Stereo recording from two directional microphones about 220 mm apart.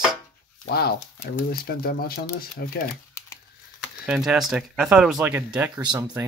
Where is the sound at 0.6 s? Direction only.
45° left (ahead or behind).